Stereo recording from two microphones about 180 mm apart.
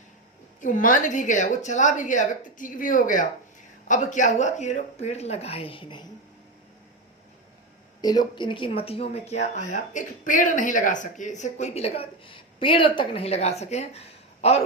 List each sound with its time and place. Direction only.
0.6 s a woman's voice: 50° left (ahead or behind); by 6.1 s 25° left (ahead or behind)
8.0 s speech: 20° left (ahead or behind)